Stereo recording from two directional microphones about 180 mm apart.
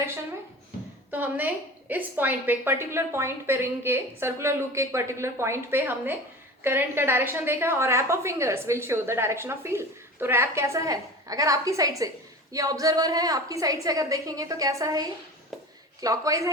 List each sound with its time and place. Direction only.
1.1 s a woman's voice: 10° right (ahead or behind)